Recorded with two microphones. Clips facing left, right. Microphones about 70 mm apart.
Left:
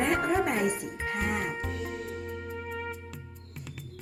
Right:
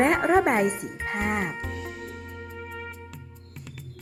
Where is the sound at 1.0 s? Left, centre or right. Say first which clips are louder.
Right 3 dB; right.